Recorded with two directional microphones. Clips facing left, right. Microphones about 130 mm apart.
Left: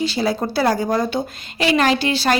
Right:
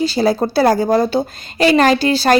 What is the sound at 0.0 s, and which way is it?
A woman's voice, 40° right (ahead or behind).